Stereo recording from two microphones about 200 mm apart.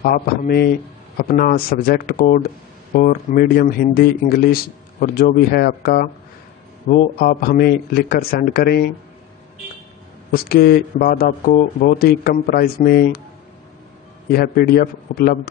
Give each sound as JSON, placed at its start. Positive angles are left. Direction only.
{"t": 0.0, "sound": "speech", "side_deg": 45}
{"t": 10.3, "sound": "speech", "side_deg": 50}
{"t": 14.3, "sound": "speech", "side_deg": 50}